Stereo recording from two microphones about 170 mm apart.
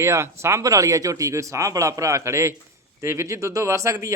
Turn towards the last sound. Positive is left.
turn(degrees=-20)  # may be behind; listen again after turning